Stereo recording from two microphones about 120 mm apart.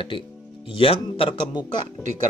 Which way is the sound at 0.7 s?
50° left (ahead or behind).